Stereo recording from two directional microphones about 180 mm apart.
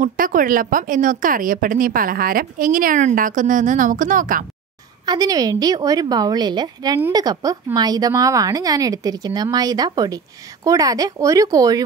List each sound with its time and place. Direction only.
0.0 s speech: 50° right (ahead or behind)
5.0 s speech: 20° right (ahead or behind)